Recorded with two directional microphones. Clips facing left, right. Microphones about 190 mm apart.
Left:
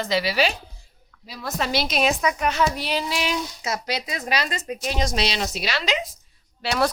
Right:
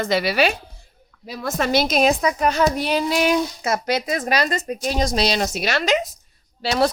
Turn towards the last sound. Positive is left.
turn(degrees=-35)  # may be behind; listen again after turning